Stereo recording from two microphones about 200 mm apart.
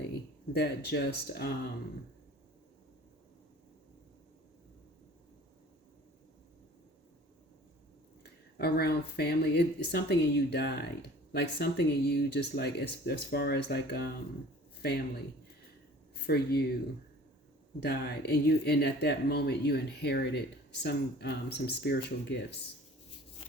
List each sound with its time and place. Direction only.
0.5 s speech: 55° left (ahead or behind)
8.2 s speech: 55° left (ahead or behind)
16.2 s speech: 50° left (ahead or behind)
17.7 s speech: 55° left (ahead or behind)